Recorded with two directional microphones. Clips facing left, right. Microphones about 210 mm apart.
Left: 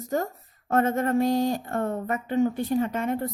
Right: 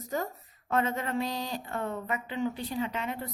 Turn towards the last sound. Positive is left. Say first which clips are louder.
# left 7 dB
turn(degrees=50)  # may be behind; listen again after turning